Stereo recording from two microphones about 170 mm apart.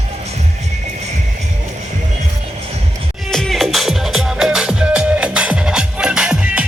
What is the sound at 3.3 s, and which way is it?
Music, centre (ahead or behind).